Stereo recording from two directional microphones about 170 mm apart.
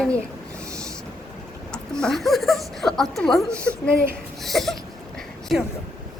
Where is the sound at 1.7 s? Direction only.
5° left (ahead or behind).